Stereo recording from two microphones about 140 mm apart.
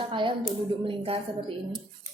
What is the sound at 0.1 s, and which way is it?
A woman's voice, 35° right (ahead or behind).